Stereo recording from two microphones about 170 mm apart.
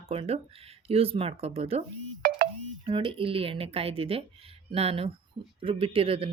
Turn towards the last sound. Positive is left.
turn(degrees=-35)  # may be behind; listen again after turning